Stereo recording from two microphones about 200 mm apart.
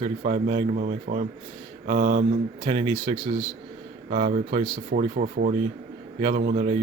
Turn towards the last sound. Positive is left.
turn(degrees=-35)  # may be behind; listen again after turning